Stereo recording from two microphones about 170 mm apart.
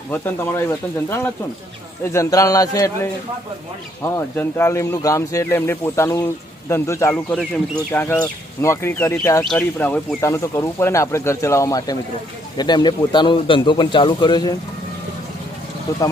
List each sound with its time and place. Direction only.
0.1 s a man's voice: 10° left (ahead or behind)
15.9 s speech: 20° left (ahead or behind)